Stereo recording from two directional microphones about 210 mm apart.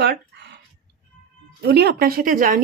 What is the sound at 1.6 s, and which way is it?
Speech, 50° right (ahead or behind).